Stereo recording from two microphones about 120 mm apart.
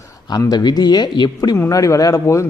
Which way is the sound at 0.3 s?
35° left (ahead or behind).